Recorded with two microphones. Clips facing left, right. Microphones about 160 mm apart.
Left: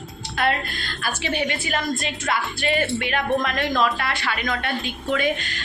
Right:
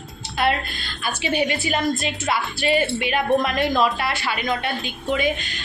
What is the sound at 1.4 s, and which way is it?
Speech, 25° right (ahead or behind).